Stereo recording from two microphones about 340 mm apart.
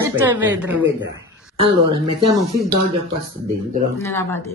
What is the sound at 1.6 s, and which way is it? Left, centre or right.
Speech, centre.